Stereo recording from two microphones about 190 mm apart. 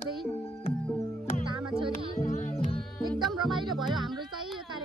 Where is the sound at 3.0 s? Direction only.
25° right (ahead or behind).